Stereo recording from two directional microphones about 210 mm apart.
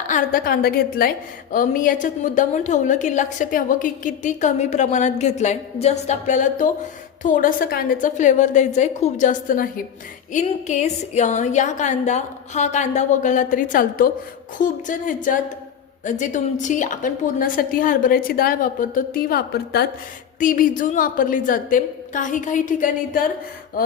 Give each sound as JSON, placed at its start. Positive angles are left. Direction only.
{"t": 0.1, "sound": "a woman's voice", "side_deg": 40}